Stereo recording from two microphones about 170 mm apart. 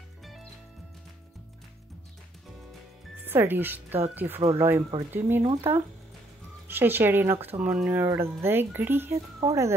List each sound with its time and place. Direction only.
0.2 s music: centre (ahead or behind)
3.3 s speech: 10° right (ahead or behind)
6.7 s speech: 10° right (ahead or behind)